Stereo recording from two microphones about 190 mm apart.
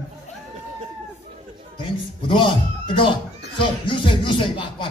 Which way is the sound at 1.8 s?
25° left (ahead or behind).